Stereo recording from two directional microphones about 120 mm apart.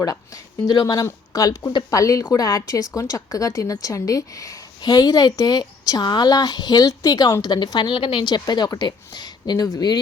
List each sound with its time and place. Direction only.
0.6 s a woman's voice: 35° left (ahead or behind)